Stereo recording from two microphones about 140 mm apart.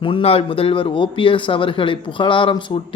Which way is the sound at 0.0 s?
40° left (ahead or behind).